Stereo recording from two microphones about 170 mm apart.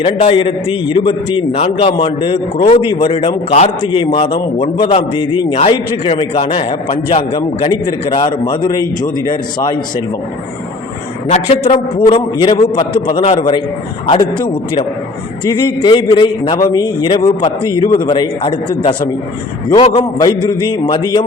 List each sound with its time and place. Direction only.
0.0 s a man's voice: 30° left (ahead or behind)
11.3 s a man's voice: 35° left (ahead or behind)
15.4 s a man's voice: 25° left (ahead or behind)